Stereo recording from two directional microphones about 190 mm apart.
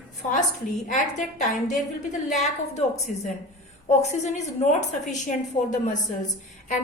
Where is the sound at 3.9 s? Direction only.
40° left (ahead or behind).